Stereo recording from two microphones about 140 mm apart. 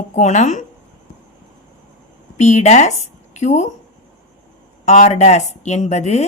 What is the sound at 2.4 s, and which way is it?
A woman's voice, 55° left (ahead or behind).